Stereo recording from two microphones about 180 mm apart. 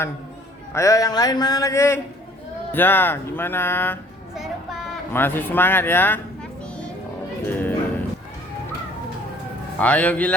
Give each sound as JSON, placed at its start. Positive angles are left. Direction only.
{"t": 0.7, "sound": "speech", "side_deg": 15}
{"t": 5.1, "sound": "speech", "side_deg": 10}
{"t": 7.4, "sound": "music", "side_deg": 10}
{"t": 9.7, "sound": "speech", "side_deg": 10}